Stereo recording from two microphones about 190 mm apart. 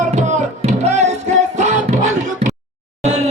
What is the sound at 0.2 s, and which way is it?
Music, 40° right (ahead or behind).